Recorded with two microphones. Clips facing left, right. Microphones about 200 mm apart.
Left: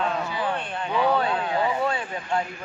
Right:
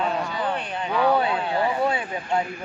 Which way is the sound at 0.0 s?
Centre (ahead or behind).